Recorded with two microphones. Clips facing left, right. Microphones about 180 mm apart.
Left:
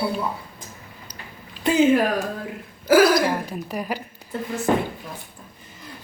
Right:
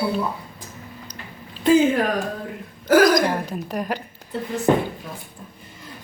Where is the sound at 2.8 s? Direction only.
5° left (ahead or behind).